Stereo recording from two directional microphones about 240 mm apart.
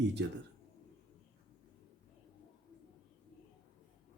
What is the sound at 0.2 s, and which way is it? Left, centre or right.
Speech, right.